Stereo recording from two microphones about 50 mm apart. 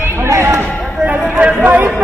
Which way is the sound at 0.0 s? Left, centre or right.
Right.